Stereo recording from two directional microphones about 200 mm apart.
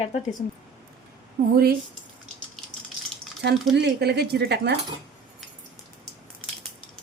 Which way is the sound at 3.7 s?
55° right (ahead or behind).